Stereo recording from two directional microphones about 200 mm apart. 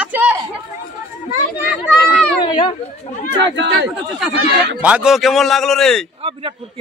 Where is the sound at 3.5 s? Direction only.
60° right (ahead or behind).